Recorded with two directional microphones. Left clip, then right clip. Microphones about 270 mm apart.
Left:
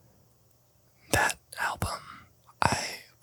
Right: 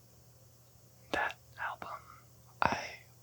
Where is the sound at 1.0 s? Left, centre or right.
Left.